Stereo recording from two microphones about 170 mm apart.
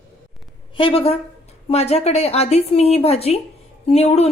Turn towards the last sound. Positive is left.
turn(degrees=40)  # may be behind; listen again after turning